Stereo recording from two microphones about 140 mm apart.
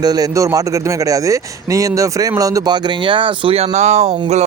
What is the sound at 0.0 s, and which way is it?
A man's voice, 25° right (ahead or behind).